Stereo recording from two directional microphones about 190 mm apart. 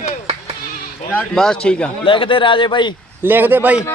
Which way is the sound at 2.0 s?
25° left (ahead or behind).